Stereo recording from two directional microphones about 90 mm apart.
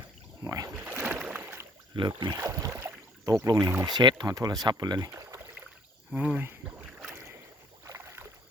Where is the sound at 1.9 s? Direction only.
65° right (ahead or behind).